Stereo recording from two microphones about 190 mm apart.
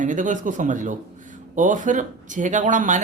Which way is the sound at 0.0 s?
45° right (ahead or behind).